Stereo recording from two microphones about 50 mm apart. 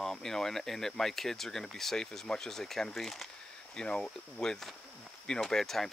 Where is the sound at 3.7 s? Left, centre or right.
Centre.